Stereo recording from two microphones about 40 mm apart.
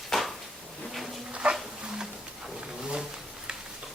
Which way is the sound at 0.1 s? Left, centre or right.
Centre.